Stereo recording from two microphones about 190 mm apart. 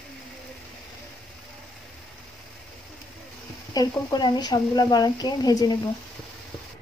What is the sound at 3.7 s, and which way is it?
Speech, 20° left (ahead or behind).